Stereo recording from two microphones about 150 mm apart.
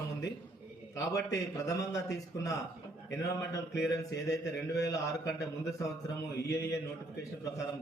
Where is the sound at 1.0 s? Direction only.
20° left (ahead or behind).